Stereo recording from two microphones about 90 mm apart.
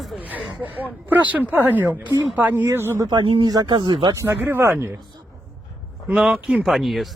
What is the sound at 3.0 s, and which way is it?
Speech, 55° right (ahead or behind).